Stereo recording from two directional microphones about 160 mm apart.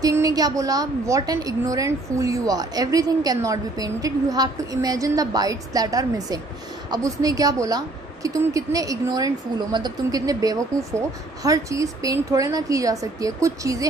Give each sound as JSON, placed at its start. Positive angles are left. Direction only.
{"t": 0.0, "sound": "a woman's voice", "side_deg": -20}